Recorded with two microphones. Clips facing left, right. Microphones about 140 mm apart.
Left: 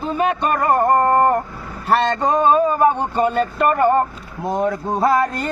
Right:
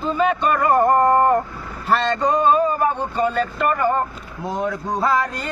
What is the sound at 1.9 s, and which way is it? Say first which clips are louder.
Speech: left 2 dB; 60° left (ahead or behind).